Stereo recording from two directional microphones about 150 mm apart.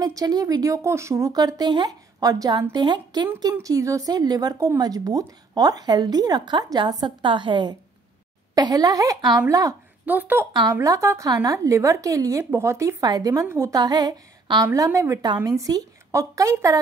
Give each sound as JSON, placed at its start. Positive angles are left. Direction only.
{"t": 0.0, "sound": "a woman's voice", "side_deg": -25}
{"t": 10.0, "sound": "a woman's voice", "side_deg": -10}